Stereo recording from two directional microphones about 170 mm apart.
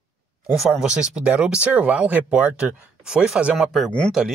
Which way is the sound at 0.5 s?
5° right (ahead or behind).